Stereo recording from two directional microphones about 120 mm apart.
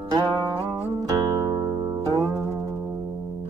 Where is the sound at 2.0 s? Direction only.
25° right (ahead or behind).